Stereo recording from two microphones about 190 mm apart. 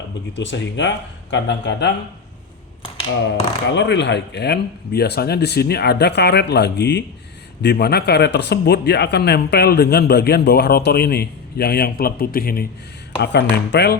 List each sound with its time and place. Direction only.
0.3 s speech: 70° left (ahead or behind)
3.7 s speech: 70° left (ahead or behind); by 12.6 s 50° left (ahead or behind)
13.2 s speech: 60° left (ahead or behind)